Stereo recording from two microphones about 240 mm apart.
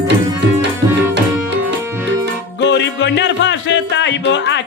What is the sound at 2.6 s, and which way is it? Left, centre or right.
Music, left.